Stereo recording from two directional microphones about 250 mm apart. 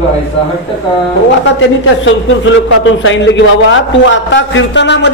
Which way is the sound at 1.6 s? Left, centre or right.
Left.